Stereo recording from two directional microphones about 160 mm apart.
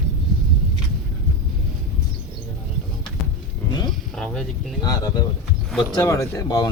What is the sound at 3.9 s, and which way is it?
Music, 5° left (ahead or behind).